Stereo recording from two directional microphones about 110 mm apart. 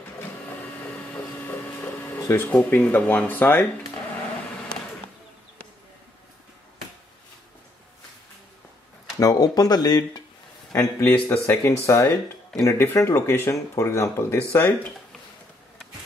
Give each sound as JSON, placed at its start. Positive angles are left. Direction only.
{"t": 0.2, "sound": "printer", "side_deg": 20}
{"t": 2.2, "sound": "speech", "side_deg": 20}
{"t": 9.2, "sound": "speech", "side_deg": 35}
{"t": 10.7, "sound": "speech", "side_deg": 25}